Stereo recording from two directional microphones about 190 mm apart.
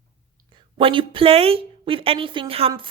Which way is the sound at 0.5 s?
25° right (ahead or behind).